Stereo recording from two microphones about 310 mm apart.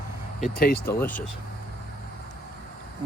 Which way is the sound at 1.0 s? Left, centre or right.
Centre.